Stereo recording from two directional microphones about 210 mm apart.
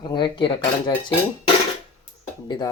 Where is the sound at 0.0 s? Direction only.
20° left (ahead or behind).